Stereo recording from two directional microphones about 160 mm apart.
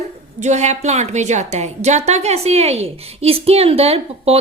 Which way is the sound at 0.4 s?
45° right (ahead or behind).